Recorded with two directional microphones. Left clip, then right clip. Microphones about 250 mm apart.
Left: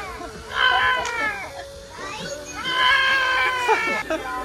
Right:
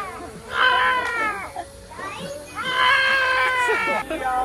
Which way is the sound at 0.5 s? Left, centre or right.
Centre.